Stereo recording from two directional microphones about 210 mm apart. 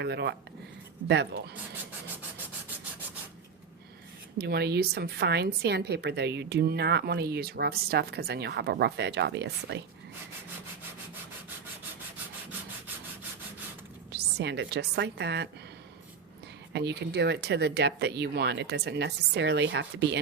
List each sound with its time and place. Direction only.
0.0 s a woman's voice: 55° right (ahead or behind)
4.4 s a woman's voice: 50° right (ahead or behind)
14.1 s a woman's voice: 55° right (ahead or behind)
16.7 s a woman's voice: 50° right (ahead or behind)